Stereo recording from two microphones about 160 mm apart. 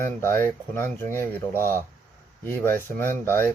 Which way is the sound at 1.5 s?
15° right (ahead or behind).